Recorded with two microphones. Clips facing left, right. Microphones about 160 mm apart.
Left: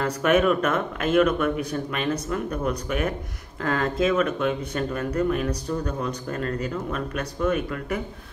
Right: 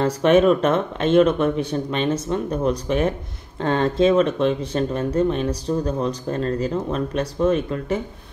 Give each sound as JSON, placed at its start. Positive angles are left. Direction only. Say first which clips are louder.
{"t": 0.0, "sound": "speech", "louder": "right 5 dB", "side_deg": -30}